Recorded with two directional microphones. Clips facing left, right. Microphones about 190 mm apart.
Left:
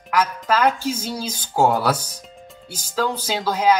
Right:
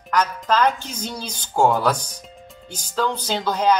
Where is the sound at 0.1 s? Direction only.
5° left (ahead or behind).